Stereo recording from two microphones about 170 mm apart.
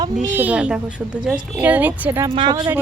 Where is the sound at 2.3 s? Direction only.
25° right (ahead or behind).